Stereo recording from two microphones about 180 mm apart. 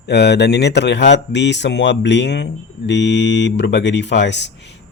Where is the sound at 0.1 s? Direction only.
70° left (ahead or behind).